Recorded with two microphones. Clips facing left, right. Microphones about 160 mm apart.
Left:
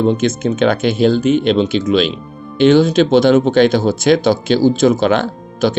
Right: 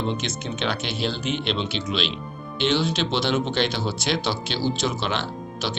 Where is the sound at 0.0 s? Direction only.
50° left (ahead or behind).